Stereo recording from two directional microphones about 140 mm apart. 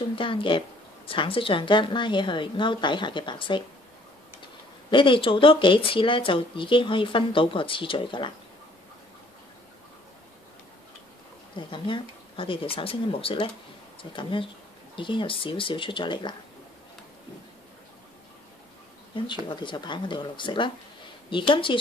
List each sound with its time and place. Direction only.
0.1 s a woman's voice: 40° left (ahead or behind)
4.9 s a woman's voice: 35° left (ahead or behind)
11.5 s a woman's voice: 35° left (ahead or behind)
19.5 s a woman's voice: 35° left (ahead or behind)